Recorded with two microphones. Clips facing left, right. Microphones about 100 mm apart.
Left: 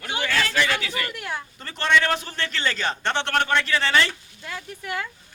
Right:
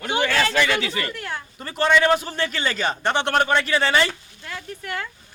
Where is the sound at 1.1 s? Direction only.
15° left (ahead or behind).